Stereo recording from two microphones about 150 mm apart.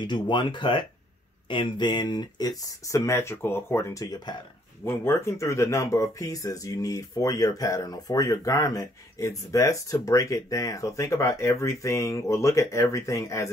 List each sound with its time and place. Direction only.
0.0 s speech: 30° left (ahead or behind)